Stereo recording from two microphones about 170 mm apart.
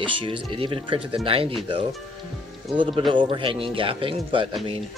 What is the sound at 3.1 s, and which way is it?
Speech, 30° right (ahead or behind).